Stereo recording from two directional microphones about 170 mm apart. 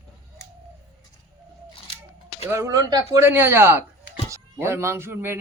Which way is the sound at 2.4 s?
15° right (ahead or behind).